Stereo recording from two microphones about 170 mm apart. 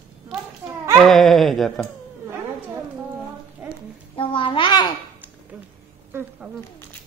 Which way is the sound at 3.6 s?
10° right (ahead or behind).